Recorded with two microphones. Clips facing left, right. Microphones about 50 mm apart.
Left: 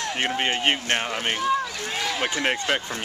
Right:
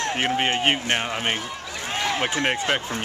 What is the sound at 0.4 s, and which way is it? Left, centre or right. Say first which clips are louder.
Speech: right 1 dB; centre.